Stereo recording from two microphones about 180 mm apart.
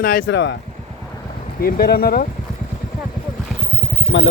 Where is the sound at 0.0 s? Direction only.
55° left (ahead or behind).